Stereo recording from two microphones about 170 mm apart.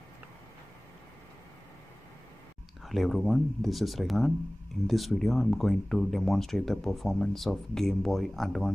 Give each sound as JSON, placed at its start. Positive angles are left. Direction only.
{"t": 2.8, "sound": "speech", "side_deg": 0}